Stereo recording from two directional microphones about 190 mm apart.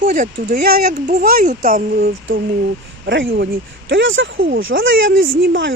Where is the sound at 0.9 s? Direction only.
40° right (ahead or behind).